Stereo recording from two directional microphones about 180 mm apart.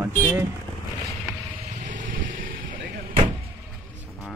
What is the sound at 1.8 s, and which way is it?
Music, 45° right (ahead or behind).